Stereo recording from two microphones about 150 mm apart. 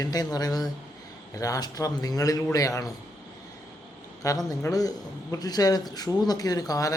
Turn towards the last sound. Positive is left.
turn(degrees=25)  # may be behind; listen again after turning